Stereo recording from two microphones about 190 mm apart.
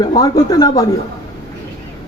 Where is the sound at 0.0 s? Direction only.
20° left (ahead or behind).